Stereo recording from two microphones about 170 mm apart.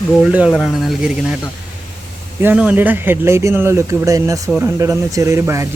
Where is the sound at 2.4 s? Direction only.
10° right (ahead or behind).